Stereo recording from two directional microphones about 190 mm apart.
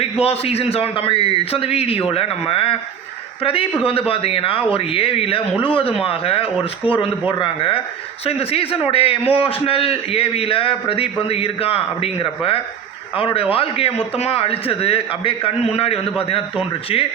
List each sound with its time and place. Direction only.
0.0 s a man's voice: 30° left (ahead or behind)